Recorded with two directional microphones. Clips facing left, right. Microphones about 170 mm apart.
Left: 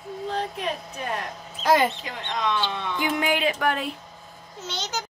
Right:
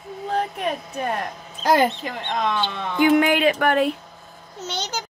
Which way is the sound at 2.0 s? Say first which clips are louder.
Right 4 dB; 55° right (ahead or behind).